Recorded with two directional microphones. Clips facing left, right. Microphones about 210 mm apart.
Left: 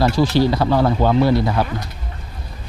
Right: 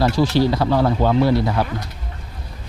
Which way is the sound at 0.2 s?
20° left (ahead or behind).